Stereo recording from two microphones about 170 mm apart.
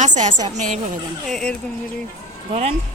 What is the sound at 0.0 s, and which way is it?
Speech, 45° right (ahead or behind).